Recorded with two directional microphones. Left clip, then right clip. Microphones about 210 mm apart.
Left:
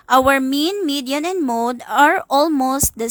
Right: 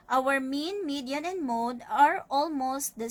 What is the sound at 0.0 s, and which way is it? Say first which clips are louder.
A woman's voice: left 12 dB; 55° left (ahead or behind).